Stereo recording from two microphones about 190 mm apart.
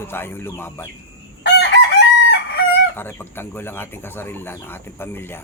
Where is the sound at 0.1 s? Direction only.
10° left (ahead or behind).